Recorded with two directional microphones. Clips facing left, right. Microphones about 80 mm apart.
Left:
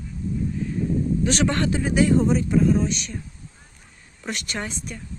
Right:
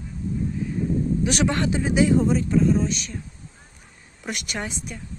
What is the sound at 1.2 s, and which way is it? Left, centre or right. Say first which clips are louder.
Speech: left 1 dB; centre.